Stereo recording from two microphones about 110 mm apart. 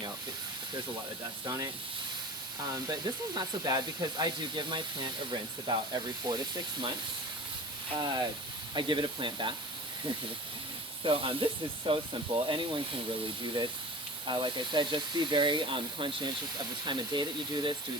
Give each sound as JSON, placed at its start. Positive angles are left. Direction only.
{"t": 1.5, "sound": "speech", "side_deg": -35}
{"t": 2.8, "sound": "speech", "side_deg": -35}
{"t": 7.9, "sound": "speech", "side_deg": -40}
{"t": 11.0, "sound": "speech", "side_deg": -50}
{"t": 14.3, "sound": "speech", "side_deg": -45}